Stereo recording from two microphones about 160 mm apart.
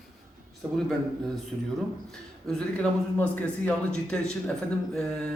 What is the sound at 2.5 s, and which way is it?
A man's voice, 5° left (ahead or behind).